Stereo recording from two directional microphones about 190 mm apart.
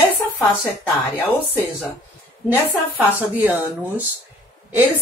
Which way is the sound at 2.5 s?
10° right (ahead or behind).